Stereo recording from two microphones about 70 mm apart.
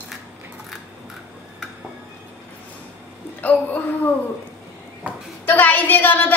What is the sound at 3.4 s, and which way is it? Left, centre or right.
Speech, left.